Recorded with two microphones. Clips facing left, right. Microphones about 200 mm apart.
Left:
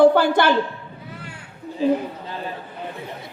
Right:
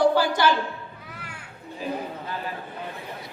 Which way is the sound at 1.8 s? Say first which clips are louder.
Left 12 dB; 30° left (ahead or behind).